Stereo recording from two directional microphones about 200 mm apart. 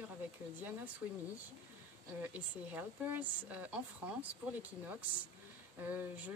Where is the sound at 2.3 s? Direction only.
10° right (ahead or behind).